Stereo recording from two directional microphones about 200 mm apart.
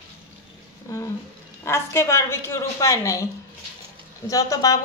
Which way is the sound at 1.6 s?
15° left (ahead or behind).